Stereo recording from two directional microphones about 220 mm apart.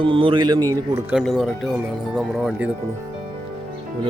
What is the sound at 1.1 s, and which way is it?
Speech, centre (ahead or behind).